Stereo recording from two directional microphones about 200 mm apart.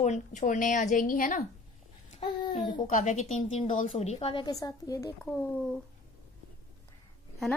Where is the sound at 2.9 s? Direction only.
40° left (ahead or behind); by 5.1 s 15° left (ahead or behind).